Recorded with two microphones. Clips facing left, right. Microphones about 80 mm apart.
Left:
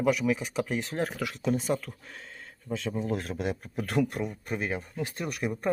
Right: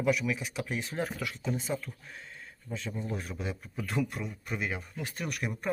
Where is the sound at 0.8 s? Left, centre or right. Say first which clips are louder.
Left 3 dB; left.